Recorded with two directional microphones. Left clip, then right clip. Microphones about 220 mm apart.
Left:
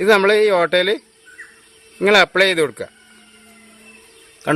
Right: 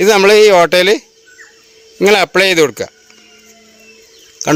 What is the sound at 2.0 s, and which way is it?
Speech, 40° right (ahead or behind).